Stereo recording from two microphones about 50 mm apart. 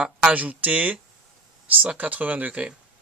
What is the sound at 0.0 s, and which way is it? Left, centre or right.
Speech, right.